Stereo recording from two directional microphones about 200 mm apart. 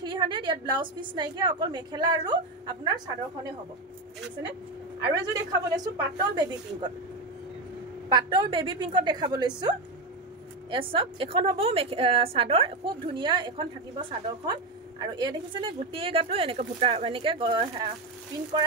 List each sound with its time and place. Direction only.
0.0 s speech: 20° right (ahead or behind)
5.2 s speech: 15° right (ahead or behind)
8.1 s speech: 20° right (ahead or behind)